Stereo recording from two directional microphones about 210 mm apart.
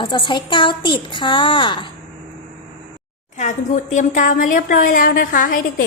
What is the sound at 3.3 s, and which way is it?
Speech, 35° left (ahead or behind).